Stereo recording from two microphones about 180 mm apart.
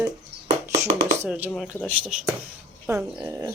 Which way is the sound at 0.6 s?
15° right (ahead or behind).